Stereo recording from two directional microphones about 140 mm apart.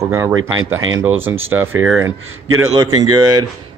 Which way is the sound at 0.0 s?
25° right (ahead or behind).